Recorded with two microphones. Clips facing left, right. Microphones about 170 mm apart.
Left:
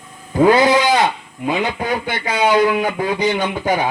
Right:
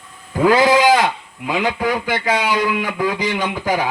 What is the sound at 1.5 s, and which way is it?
Speech, 90° right.